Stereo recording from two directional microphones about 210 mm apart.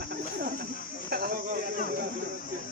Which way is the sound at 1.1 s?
45° right (ahead or behind).